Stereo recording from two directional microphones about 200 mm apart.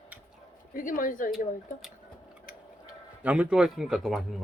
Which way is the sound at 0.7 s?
45° left (ahead or behind).